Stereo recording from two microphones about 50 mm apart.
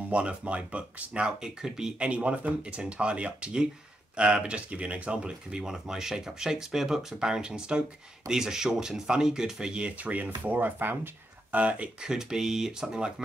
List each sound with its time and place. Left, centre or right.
0.1 s speech: right
11.5 s speech: right
12.0 s speech: centre